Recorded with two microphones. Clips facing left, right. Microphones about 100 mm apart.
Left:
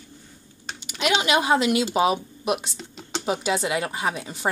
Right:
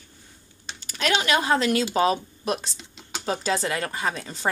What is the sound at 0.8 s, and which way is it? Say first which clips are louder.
Typing: left 1 dB; 15° left (ahead or behind).